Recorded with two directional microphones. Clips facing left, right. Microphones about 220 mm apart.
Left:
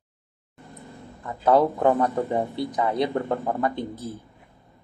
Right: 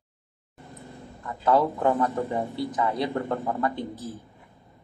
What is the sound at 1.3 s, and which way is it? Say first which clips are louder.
Speech: left 3 dB; 20° left (ahead or behind).